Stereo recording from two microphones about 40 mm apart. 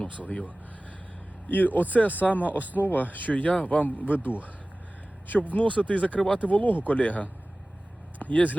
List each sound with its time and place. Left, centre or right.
0.2 s speech: left
1.5 s speech: left
5.3 s speech: left
6.5 s speech: left